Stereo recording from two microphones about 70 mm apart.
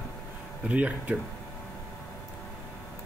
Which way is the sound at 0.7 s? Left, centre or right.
Right.